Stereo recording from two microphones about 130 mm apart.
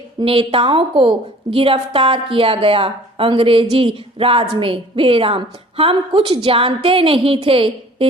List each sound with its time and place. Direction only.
0.2 s a woman's voice: 45° right (ahead or behind)